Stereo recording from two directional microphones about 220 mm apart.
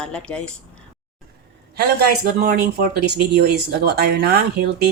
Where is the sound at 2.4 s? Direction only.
45° right (ahead or behind).